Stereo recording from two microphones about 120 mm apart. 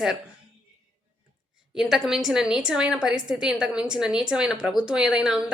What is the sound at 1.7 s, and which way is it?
A woman's voice, 5° right (ahead or behind).